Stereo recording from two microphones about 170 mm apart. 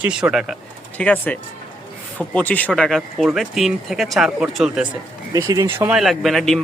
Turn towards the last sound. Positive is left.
turn(degrees=0)  # may be behind; listen again after turning